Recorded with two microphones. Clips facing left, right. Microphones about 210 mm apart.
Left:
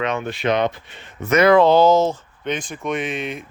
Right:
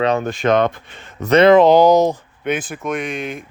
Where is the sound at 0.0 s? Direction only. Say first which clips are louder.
Right 5 dB; 40° right (ahead or behind).